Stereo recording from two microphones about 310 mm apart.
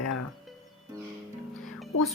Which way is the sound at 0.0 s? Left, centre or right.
Left.